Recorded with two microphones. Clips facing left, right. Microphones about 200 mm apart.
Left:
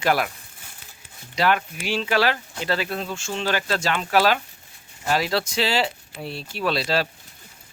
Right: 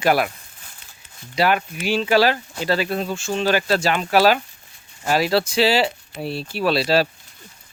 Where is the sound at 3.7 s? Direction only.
10° right (ahead or behind).